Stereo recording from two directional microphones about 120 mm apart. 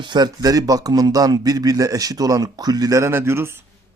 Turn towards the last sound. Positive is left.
turn(degrees=-20)  # may be behind; listen again after turning